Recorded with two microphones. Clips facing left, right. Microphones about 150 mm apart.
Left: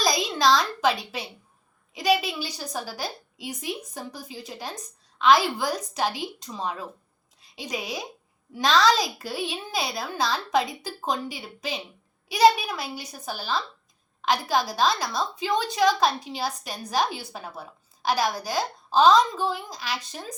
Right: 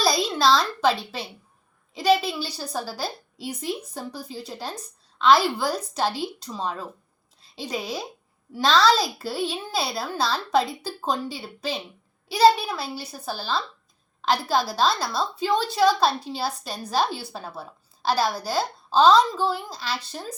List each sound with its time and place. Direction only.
0.0 s a woman's voice: 15° left (ahead or behind)